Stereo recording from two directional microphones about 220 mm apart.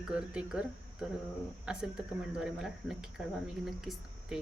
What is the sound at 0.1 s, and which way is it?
Speech, 5° right (ahead or behind).